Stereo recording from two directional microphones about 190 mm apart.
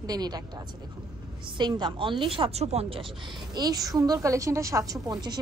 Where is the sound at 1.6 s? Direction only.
25° right (ahead or behind).